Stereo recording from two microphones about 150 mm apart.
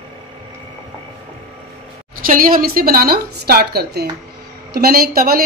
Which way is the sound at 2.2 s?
70° right (ahead or behind).